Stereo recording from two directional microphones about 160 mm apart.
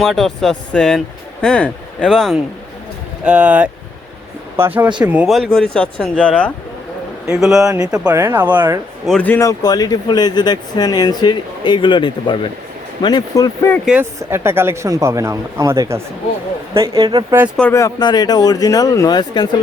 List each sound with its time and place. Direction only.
0.0 s speech: centre (ahead or behind)
7.3 s speech: 5° right (ahead or behind)
8.1 s speech: 15° right (ahead or behind)
9.0 s speech: 5° left (ahead or behind); by 13.5 s 25° left (ahead or behind)
13.8 s speech: 10° right (ahead or behind); by 17.2 s 25° right (ahead or behind)
17.6 s speech: 15° left (ahead or behind)